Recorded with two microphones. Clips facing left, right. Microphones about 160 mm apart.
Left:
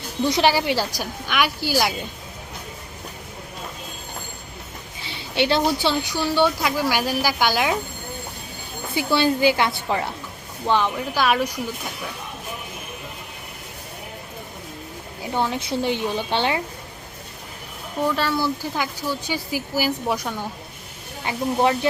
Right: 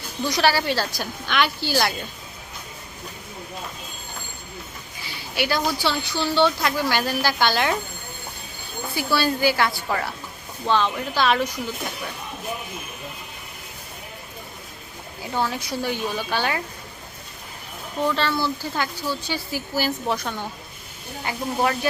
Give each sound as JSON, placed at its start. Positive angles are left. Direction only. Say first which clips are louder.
{"t": 0.3, "sound": "a woman's voice", "louder": "left 2 dB", "side_deg": 20}
{"t": 5.0, "sound": "a woman's voice", "louder": "left 4 dB", "side_deg": 25}
{"t": 9.0, "sound": "a woman's voice", "louder": "left 3 dB", "side_deg": 20}
{"t": 15.2, "sound": "a woman's voice", "louder": "left 2 dB", "side_deg": 20}
{"t": 18.0, "sound": "a woman's voice", "louder": "left 1 dB", "side_deg": 10}
{"t": 21.2, "sound": "a woman's voice", "louder": "left 3 dB", "side_deg": 25}